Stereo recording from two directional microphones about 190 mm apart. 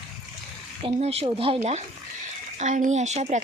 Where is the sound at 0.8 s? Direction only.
30° right (ahead or behind).